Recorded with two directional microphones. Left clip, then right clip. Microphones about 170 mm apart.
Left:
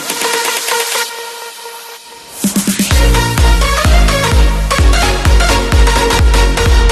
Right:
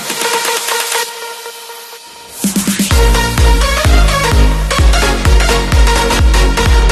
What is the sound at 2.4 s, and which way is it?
Music, centre (ahead or behind).